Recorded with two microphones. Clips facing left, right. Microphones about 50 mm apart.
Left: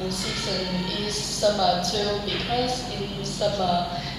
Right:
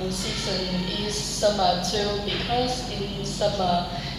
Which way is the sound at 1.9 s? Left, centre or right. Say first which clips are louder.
Even; centre.